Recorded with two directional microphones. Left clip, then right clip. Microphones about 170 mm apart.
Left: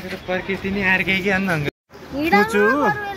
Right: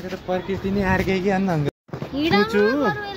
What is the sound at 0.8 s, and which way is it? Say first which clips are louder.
Speech: left 4 dB; 20° right (ahead or behind).